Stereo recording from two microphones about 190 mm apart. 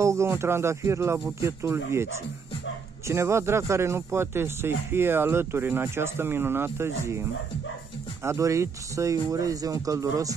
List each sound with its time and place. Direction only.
0.0 s speech: 15° right (ahead or behind)
3.1 s speech: 15° right (ahead or behind)